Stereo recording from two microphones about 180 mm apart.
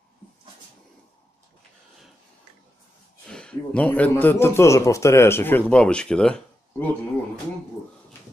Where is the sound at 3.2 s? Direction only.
5° left (ahead or behind).